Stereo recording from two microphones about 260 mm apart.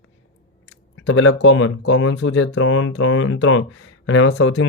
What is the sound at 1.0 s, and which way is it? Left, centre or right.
Speech, left.